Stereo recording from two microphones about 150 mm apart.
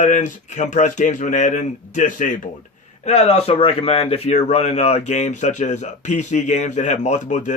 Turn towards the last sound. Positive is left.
turn(degrees=55)  # may be behind; listen again after turning